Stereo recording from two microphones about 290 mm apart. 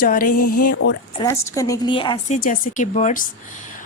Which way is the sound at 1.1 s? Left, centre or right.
Centre.